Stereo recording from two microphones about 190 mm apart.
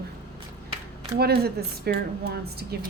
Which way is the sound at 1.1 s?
55° right (ahead or behind).